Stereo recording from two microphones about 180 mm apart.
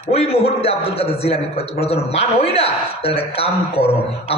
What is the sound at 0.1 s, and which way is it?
A man's voice, 35° left (ahead or behind).